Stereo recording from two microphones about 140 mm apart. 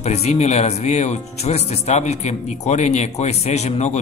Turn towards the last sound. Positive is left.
turn(degrees=55)  # may be behind; listen again after turning